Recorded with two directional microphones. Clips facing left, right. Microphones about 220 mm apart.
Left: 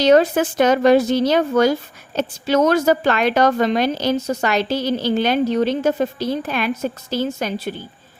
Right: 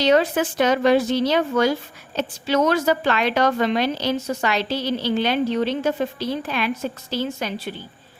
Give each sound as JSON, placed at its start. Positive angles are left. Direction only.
{"t": 0.0, "sound": "a woman's voice", "side_deg": 45}